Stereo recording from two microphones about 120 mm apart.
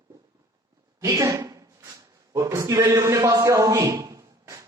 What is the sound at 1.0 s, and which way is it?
A woman's voice, 25° right (ahead or behind).